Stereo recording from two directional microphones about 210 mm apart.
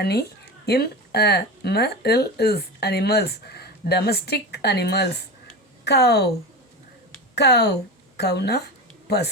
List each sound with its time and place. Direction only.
0.0 s speech: 50° left (ahead or behind)
7.3 s a woman's voice: 50° left (ahead or behind)